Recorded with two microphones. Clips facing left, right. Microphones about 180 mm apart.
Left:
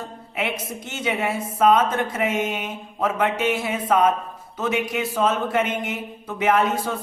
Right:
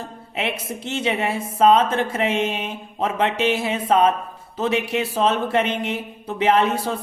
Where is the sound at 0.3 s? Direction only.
30° right (ahead or behind).